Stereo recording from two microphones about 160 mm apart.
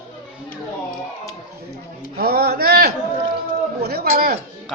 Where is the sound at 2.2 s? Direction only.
75° right (ahead or behind).